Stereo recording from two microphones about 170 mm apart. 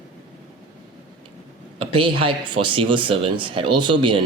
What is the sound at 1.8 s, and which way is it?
Speech, 30° right (ahead or behind).